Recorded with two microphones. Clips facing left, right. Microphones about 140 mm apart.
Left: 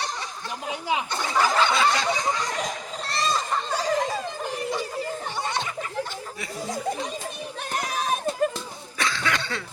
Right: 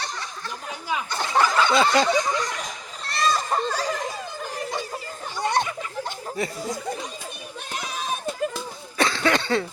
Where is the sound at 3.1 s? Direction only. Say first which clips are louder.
Right 4 dB; 25° left (ahead or behind).